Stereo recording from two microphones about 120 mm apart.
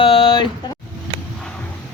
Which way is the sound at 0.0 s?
50° left (ahead or behind).